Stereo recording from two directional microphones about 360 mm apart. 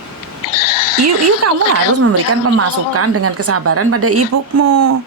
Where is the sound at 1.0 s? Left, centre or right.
Right.